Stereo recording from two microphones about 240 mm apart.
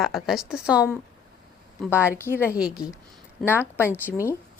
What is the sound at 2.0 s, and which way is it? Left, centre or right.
Speech, centre.